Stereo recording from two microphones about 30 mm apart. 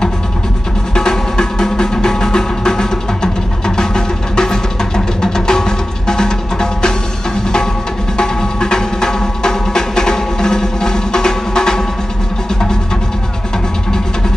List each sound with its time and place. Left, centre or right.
0.9 s music: left
8.2 s music: left